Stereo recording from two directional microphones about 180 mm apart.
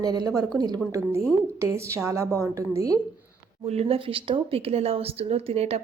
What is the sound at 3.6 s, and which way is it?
A woman's voice, 35° right (ahead or behind).